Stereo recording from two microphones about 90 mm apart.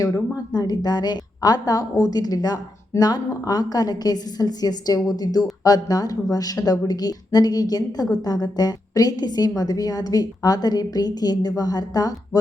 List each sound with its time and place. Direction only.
0.0 s a woman's voice: 45° left (ahead or behind)